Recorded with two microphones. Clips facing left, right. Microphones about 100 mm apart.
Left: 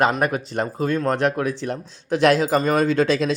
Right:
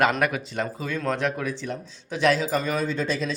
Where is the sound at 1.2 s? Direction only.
60° left (ahead or behind).